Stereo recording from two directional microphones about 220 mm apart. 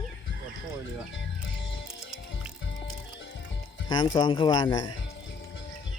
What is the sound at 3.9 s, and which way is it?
Speech, 20° left (ahead or behind).